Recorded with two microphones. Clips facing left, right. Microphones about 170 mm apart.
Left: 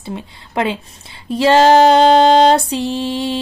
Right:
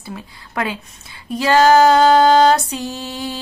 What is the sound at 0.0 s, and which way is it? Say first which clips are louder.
Female singing: left 5 dB; 25° left (ahead or behind).